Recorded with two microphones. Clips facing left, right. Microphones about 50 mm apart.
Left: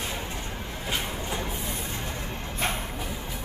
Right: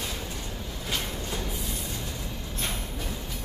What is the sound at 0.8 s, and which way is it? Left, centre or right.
Vehicle, left.